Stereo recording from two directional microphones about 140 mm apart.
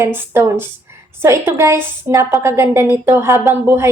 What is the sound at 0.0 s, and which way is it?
A woman's voice, 20° right (ahead or behind).